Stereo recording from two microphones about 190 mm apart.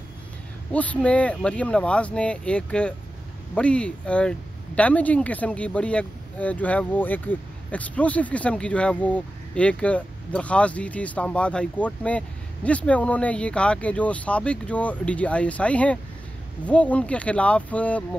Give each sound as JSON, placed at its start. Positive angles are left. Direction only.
{"t": 0.7, "sound": "speech", "side_deg": 5}